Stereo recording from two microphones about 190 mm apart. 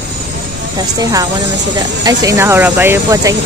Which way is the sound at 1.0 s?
20° right (ahead or behind).